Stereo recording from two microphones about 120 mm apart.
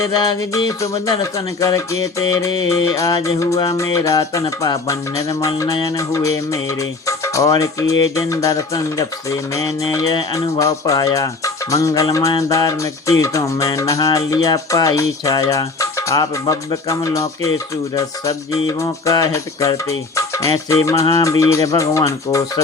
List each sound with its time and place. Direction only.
0.0 s music: 30° left (ahead or behind)